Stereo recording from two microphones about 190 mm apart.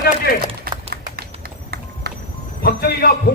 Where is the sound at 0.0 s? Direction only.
50° left (ahead or behind).